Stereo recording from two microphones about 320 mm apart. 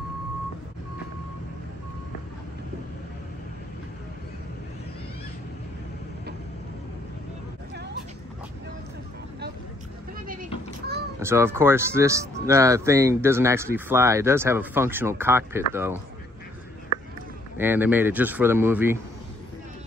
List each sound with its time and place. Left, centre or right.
10.2 s a sound: right
11.1 s speech: centre
17.6 s speech: centre